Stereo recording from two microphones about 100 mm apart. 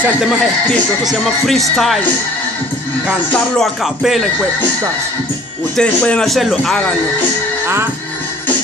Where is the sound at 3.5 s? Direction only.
Centre (ahead or behind).